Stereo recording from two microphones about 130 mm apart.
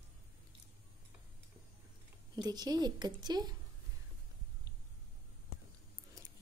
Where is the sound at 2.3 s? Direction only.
30° right (ahead or behind).